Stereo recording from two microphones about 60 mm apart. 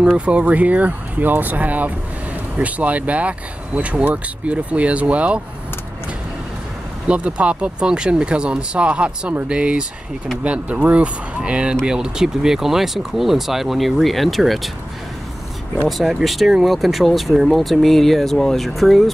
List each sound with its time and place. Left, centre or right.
0.2 s speech: right
7.1 s speech: centre
16.0 s speech: centre